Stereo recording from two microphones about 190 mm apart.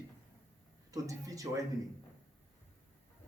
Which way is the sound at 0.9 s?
15° right (ahead or behind).